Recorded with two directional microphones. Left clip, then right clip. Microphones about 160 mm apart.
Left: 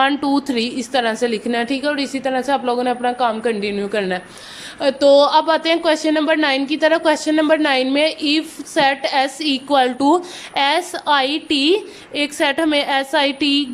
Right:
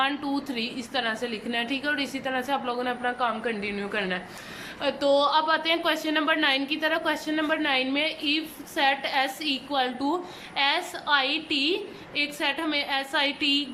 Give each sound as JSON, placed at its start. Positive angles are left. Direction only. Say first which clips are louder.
{"t": 0.0, "sound": "a woman's voice", "louder": "left 10 dB", "side_deg": 45}